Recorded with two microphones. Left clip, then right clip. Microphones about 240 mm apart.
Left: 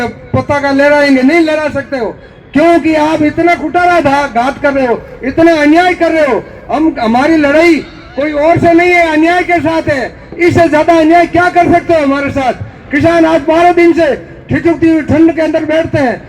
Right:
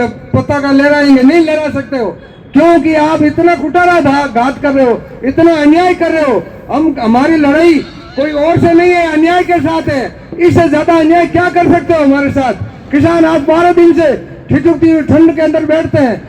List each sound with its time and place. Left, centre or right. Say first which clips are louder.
0.0 s a man's voice: right 1 dB; left